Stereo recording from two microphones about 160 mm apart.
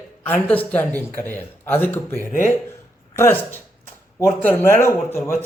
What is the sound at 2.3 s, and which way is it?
Speech, 55° left (ahead or behind).